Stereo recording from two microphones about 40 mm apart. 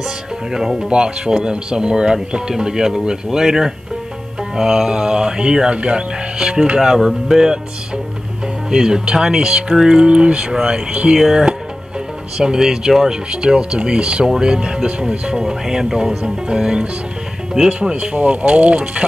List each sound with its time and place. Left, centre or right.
0.5 s speech: centre
0.8 s speech: right
8.6 s speech: centre
10.0 s speech: right
11.1 s speech: centre
18.1 s speech: right